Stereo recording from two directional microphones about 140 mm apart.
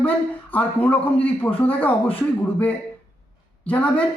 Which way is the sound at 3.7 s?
10° left (ahead or behind).